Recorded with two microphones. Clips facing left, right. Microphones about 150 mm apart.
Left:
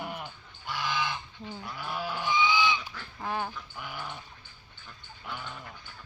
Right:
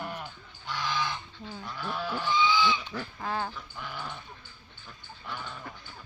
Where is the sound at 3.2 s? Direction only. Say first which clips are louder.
Left 1 dB; 15° left (ahead or behind).